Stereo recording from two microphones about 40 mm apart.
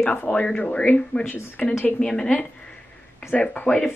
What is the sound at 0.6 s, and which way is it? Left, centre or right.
Speech, left.